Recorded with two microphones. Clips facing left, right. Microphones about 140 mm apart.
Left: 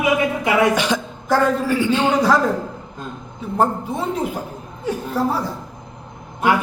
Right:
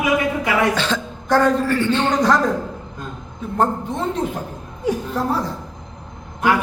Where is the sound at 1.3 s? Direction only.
5° left (ahead or behind).